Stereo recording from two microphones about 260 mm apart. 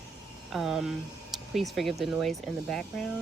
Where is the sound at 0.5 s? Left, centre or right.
Centre.